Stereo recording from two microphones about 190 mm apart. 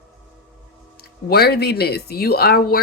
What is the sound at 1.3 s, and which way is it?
Speech, 55° left (ahead or behind).